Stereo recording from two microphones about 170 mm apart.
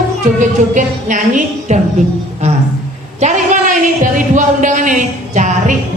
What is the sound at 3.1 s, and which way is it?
Speech, 45° right (ahead or behind).